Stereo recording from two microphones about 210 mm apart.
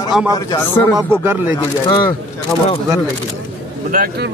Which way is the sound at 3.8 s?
45° right (ahead or behind).